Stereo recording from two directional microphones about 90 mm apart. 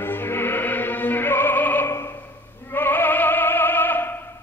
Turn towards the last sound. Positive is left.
turn(degrees=25)  # may be behind; listen again after turning